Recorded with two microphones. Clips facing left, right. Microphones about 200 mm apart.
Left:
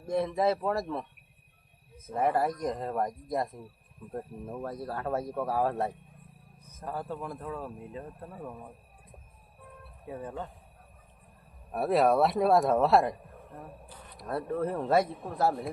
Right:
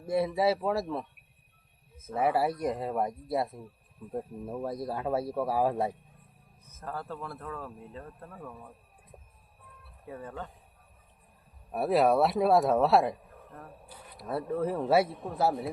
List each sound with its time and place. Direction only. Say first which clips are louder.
0.0 s speech: right 1 dB; 5° right (ahead or behind)
2.1 s speech: even; 5° right (ahead or behind)
6.7 s speech: left 2 dB; 15° left (ahead or behind)
10.1 s speech: left 2 dB; 15° left (ahead or behind)
11.7 s a man's voice: even; centre (ahead or behind)